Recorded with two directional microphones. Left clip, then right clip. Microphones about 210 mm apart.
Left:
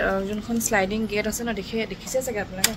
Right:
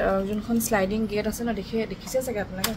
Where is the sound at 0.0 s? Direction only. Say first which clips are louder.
Even; 10° right (ahead or behind).